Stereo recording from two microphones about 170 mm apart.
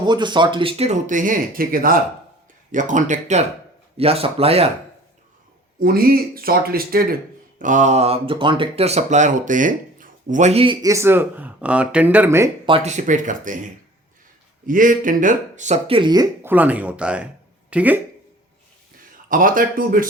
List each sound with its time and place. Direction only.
0.0 s speech: 25° right (ahead or behind)
5.8 s speech: 60° right (ahead or behind)
7.6 s speech: 45° right (ahead or behind)
10.8 s speech: 15° right (ahead or behind)
12.6 s speech: 35° right (ahead or behind)
14.7 s speech: 50° right (ahead or behind); by 18.0 s 10° right (ahead or behind)
19.3 s speech: 55° right (ahead or behind)